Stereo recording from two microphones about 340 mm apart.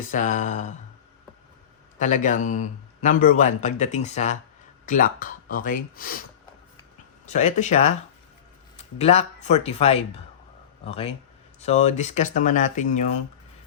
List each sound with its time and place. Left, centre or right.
0.0 s speech: left
2.0 s speech: left
7.3 s speech: left
9.0 s speech: centre